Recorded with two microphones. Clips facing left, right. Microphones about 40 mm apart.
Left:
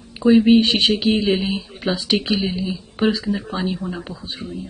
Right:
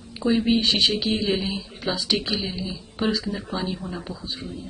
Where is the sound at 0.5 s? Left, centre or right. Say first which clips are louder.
Left 6 dB; left.